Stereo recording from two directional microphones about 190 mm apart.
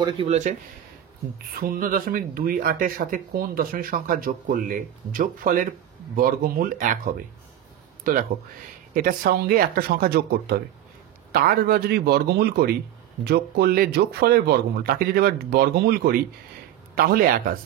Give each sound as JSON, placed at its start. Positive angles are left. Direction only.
{"t": 0.0, "sound": "speech", "side_deg": -30}
{"t": 1.6, "sound": "speech", "side_deg": -50}